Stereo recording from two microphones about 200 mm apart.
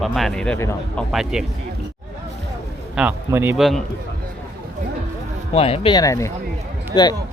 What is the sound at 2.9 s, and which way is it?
Speech, 10° right (ahead or behind).